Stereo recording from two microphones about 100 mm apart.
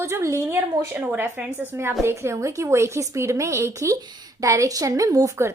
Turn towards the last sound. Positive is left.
turn(degrees=-30)  # may be behind; listen again after turning